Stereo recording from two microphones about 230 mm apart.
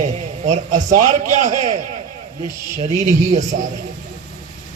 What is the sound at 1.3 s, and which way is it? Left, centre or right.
Speech, right.